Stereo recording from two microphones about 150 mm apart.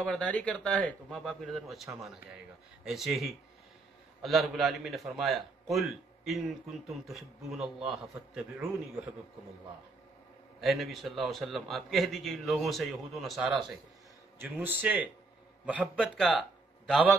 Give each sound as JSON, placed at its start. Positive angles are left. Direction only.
{"t": 0.0, "sound": "a man's voice", "side_deg": 5}
{"t": 10.6, "sound": "a man's voice", "side_deg": 0}
{"t": 14.4, "sound": "a man's voice", "side_deg": -15}